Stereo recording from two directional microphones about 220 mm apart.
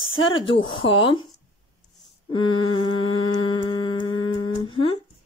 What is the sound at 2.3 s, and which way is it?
Humming, 20° left (ahead or behind).